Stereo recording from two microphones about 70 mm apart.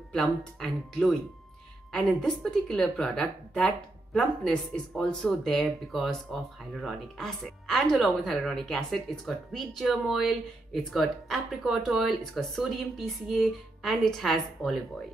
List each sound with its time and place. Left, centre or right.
0.1 s a woman's voice: centre